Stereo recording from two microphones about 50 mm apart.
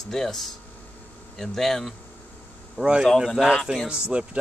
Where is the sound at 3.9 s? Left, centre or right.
Right.